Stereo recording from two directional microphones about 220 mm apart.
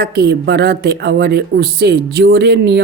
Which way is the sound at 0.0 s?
50° right (ahead or behind).